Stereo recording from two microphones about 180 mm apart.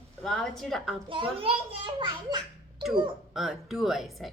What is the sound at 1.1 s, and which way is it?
A child's voice, 30° right (ahead or behind).